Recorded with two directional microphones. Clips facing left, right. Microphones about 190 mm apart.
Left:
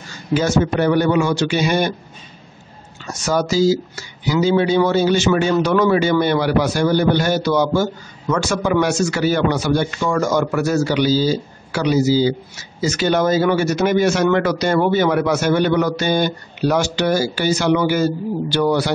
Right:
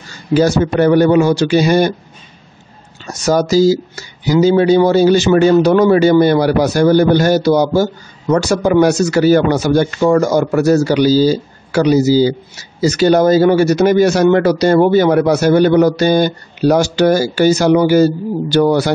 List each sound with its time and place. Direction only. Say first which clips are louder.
0.3 s speech: right 5 dB; 35° right (ahead or behind)
3.1 s speech: right 6 dB; 40° right (ahead or behind)